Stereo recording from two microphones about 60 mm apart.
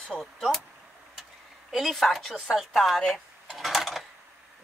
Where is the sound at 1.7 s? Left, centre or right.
Centre.